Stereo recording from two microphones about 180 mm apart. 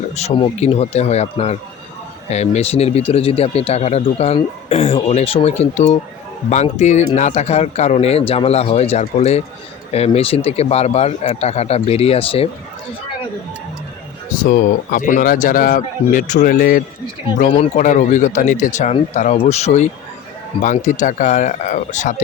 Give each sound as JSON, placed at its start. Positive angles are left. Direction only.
{"t": 0.2, "sound": "speech", "side_deg": 35}
{"t": 14.3, "sound": "speech", "side_deg": 45}
{"t": 17.5, "sound": "speech", "side_deg": 40}